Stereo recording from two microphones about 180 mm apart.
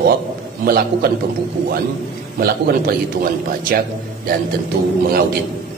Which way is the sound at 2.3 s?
55° right (ahead or behind).